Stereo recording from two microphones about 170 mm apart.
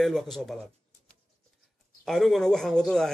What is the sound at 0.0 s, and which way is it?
Speech, centre (ahead or behind).